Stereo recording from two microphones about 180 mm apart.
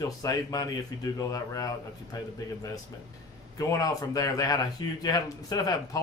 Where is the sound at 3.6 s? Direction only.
20° left (ahead or behind).